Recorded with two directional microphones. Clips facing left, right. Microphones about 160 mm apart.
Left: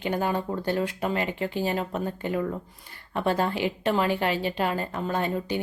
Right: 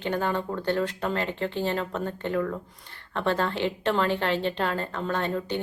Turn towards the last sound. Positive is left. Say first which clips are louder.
# left 1 dB
turn(degrees=10)  # may be behind; listen again after turning